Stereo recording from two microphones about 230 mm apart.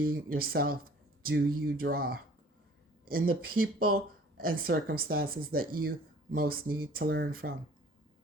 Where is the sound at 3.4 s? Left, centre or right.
Right.